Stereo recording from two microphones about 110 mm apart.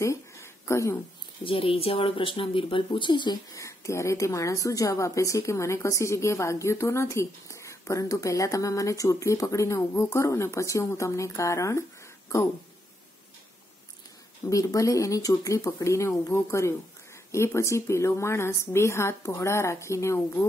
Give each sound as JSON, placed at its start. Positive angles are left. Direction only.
{"t": 0.0, "sound": "a sound", "side_deg": 25}
{"t": 1.4, "sound": "speech", "side_deg": 55}
{"t": 3.5, "sound": "a woman's voice", "side_deg": 30}
{"t": 14.5, "sound": "a woman's voice", "side_deg": 30}